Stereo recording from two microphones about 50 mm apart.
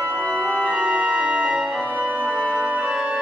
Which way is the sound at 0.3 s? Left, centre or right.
Right.